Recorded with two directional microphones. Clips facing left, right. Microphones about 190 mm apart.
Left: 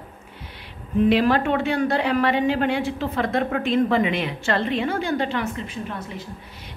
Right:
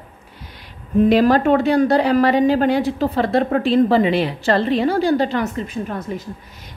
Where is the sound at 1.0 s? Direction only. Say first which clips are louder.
Right 5 dB; 40° right (ahead or behind).